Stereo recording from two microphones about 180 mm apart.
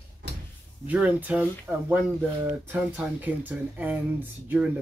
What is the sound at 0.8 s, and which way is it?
Speech, 10° right (ahead or behind).